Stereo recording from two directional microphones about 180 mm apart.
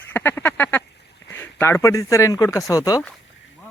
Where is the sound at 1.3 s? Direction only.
10° left (ahead or behind).